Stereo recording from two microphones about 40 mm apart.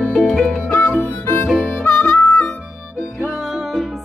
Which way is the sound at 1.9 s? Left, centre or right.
Left.